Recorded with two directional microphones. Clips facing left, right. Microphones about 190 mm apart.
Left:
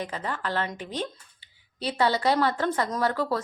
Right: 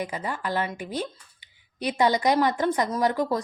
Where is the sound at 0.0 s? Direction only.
10° right (ahead or behind).